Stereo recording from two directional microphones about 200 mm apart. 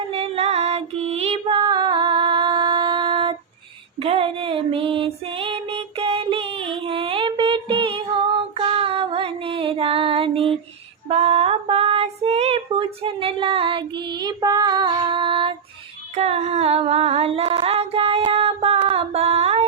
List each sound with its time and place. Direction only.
0.1 s music: 30° right (ahead or behind)
4.0 s female singing: 30° right (ahead or behind)
11.1 s child singing: 30° right (ahead or behind)
16.1 s singing: 30° right (ahead or behind)